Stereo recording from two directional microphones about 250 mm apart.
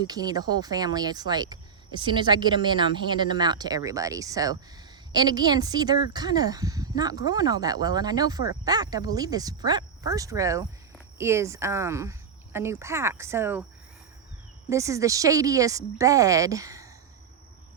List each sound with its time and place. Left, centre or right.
0.0 s speech: centre
14.7 s speech: centre